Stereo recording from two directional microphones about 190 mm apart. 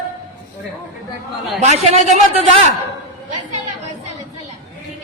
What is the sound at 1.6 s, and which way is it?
A man's voice, 35° right (ahead or behind).